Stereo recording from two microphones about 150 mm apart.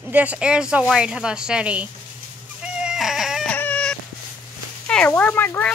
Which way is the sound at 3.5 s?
10° left (ahead or behind).